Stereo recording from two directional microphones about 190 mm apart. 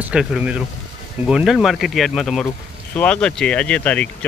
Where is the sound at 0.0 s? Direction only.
5° right (ahead or behind).